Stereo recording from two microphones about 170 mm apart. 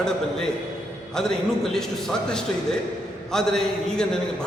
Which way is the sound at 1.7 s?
5° left (ahead or behind).